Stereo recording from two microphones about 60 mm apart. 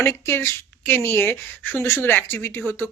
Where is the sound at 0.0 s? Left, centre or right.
Left.